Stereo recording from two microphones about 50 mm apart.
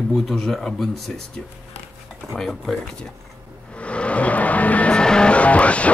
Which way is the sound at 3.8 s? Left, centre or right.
Left.